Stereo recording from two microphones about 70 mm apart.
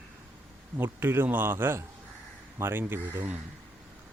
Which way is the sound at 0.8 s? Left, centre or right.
Right.